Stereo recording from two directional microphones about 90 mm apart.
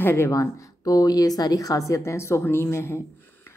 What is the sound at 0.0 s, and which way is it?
Speech, 30° left (ahead or behind).